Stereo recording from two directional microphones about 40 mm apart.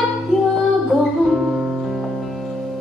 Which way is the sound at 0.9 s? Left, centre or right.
Centre.